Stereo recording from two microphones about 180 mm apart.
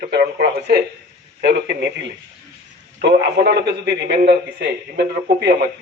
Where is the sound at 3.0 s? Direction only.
70° right (ahead or behind).